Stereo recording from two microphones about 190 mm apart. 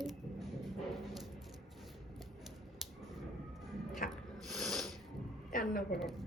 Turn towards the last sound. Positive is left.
turn(degrees=45)  # may be behind; listen again after turning